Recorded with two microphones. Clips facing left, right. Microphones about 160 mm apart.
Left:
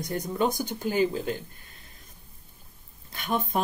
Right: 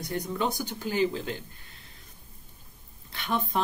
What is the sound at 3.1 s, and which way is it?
Speech, 45° left (ahead or behind).